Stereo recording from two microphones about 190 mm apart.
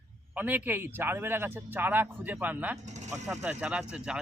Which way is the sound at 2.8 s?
40° right (ahead or behind).